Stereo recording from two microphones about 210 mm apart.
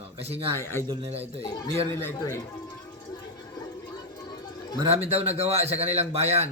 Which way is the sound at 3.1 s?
20° left (ahead or behind).